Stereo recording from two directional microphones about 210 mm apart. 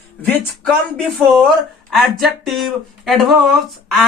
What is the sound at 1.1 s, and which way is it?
Speech, centre (ahead or behind).